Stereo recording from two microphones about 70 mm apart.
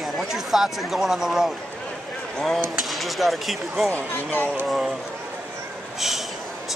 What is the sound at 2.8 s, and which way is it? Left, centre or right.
Speech, centre.